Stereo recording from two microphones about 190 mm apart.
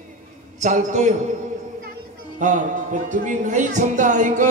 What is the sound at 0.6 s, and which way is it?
Speech, 40° right (ahead or behind).